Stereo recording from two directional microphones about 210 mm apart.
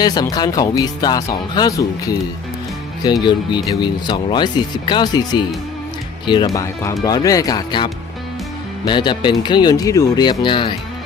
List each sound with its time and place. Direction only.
0.0 s speech: 20° left (ahead or behind)